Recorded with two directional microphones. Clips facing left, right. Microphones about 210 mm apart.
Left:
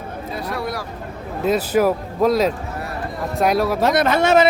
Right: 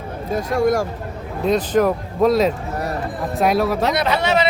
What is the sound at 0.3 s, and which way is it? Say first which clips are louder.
Speech: right 9 dB; 45° right (ahead or behind).